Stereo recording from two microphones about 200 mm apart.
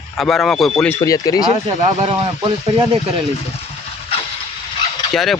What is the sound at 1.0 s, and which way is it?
Speech, 20° left (ahead or behind).